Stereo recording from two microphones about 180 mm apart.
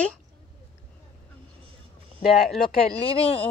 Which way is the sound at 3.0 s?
30° left (ahead or behind).